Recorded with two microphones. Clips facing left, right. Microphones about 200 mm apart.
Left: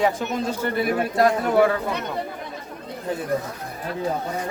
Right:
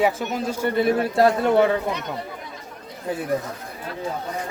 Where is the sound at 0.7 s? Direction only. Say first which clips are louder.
Right 5 dB; 25° right (ahead or behind).